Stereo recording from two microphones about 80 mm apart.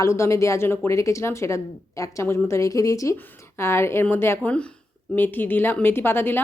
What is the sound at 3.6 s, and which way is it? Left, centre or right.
A woman's voice, left.